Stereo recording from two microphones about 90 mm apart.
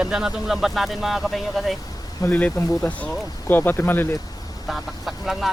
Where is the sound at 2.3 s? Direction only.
15° left (ahead or behind).